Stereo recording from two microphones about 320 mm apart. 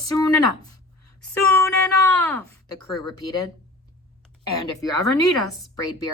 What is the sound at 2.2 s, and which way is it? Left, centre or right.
Speech, centre.